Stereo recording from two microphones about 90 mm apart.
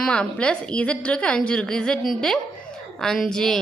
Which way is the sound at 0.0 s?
10° left (ahead or behind).